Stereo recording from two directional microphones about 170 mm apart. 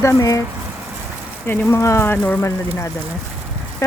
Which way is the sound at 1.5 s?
15° left (ahead or behind).